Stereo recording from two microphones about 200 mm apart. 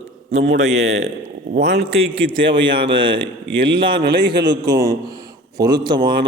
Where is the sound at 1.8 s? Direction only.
30° right (ahead or behind).